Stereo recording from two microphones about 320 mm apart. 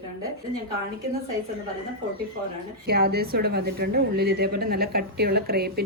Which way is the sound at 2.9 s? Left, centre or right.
Right.